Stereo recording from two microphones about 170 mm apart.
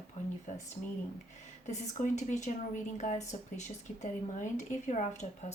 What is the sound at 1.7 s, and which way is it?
A woman's voice, 45° left (ahead or behind).